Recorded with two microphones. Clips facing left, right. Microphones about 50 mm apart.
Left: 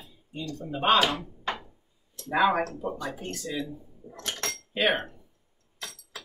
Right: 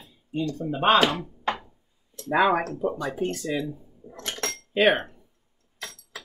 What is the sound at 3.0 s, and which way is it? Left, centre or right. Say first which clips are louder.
Speech: right 7 dB; right.